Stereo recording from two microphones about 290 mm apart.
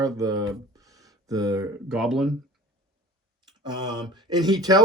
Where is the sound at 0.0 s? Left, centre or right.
Centre.